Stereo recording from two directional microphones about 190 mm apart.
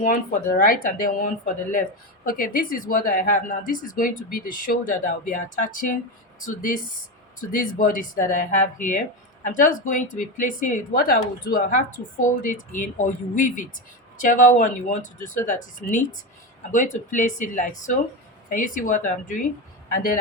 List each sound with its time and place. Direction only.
0.1 s speech: 50° left (ahead or behind)